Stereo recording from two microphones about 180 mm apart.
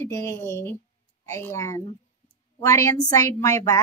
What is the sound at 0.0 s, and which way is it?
A woman's voice, 15° left (ahead or behind).